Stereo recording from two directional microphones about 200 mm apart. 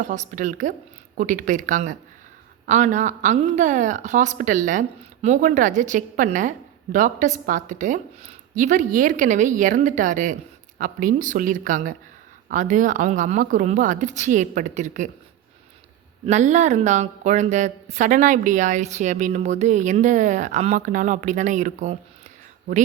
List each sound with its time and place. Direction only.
0.0 s a woman's voice: 40° right (ahead or behind)
16.2 s a woman's voice: 35° right (ahead or behind)